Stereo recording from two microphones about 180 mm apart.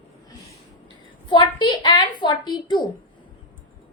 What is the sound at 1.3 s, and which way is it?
A woman's voice, 25° left (ahead or behind).